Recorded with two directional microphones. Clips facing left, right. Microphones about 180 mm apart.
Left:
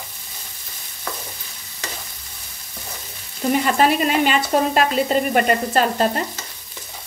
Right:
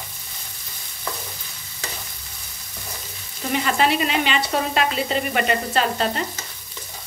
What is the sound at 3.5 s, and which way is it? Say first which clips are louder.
Frying: left 2 dB; 45° left (ahead or behind).